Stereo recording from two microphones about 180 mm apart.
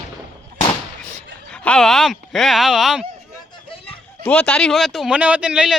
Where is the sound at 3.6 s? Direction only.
30° left (ahead or behind).